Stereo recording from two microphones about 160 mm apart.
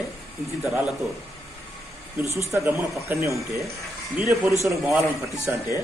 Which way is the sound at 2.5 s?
20° right (ahead or behind).